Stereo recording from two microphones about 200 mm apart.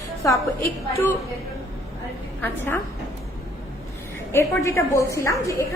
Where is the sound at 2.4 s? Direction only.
10° left (ahead or behind).